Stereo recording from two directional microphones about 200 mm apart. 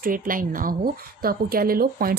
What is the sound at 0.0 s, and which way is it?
A woman's voice, 45° right (ahead or behind).